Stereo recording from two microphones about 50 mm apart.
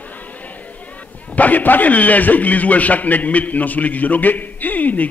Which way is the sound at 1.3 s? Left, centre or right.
Left.